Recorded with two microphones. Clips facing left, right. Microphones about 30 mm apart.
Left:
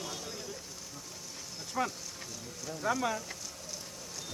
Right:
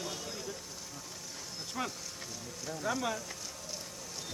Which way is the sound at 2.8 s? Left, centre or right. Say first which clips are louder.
Left 3 dB; left.